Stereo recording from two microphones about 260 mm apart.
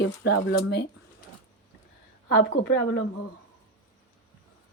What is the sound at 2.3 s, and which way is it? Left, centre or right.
Speech, left.